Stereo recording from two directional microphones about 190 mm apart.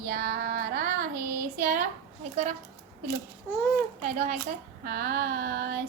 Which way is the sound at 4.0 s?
40° right (ahead or behind).